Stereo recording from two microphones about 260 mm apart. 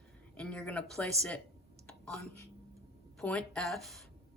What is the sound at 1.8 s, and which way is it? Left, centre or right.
Whispering, centre.